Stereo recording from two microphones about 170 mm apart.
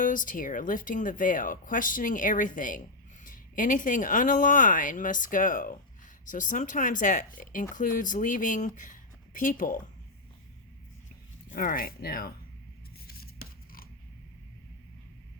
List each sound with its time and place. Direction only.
0.0 s speech: 50° left (ahead or behind)
11.5 s speech: 55° left (ahead or behind)
13.1 s scissors: 65° left (ahead or behind)